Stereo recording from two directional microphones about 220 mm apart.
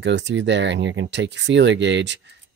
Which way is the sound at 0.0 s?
55° right (ahead or behind).